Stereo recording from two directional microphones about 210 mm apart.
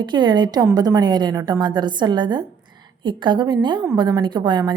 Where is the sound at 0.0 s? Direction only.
20° right (ahead or behind).